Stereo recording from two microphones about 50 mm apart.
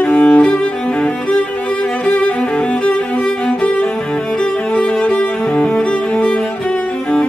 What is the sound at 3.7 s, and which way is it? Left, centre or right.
Music, left.